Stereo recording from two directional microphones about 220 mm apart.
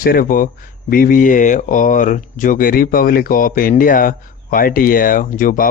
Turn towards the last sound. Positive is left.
turn(degrees=40)  # may be behind; listen again after turning